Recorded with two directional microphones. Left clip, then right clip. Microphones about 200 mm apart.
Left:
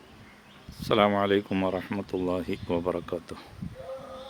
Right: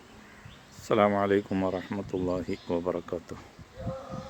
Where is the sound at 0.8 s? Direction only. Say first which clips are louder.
Left 1 dB; 5° left (ahead or behind).